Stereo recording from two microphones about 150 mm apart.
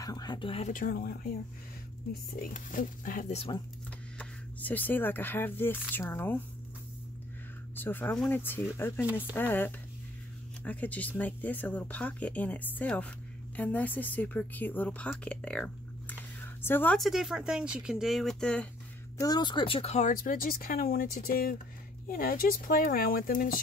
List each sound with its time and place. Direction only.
0.0 s speech: 25° left (ahead or behind)
0.7 s speech: 65° left (ahead or behind)
2.3 s speech: 70° left (ahead or behind)
3.3 s speech: 40° left (ahead or behind)
4.2 s speech: 10° left (ahead or behind)
7.7 s a woman's voice: 15° left (ahead or behind)
17.0 s speech: centre (ahead or behind)
19.1 s speech: 25° left (ahead or behind); by 23.6 s 70° left (ahead or behind)